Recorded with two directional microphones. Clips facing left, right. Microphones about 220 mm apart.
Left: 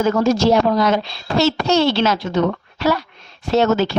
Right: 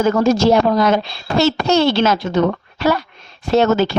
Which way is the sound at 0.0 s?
50° right (ahead or behind).